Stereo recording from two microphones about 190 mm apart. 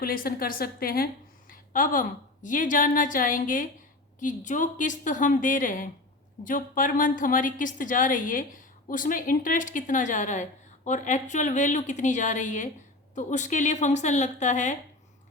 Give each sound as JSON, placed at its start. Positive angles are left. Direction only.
{"t": 0.0, "sound": "a woman's voice", "side_deg": 50}